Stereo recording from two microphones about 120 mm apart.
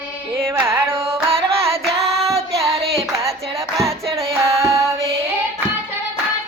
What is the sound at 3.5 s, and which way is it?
Music, 25° right (ahead or behind).